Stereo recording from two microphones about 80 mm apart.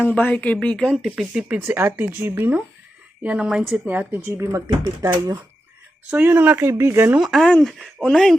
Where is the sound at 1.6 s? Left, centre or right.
Right.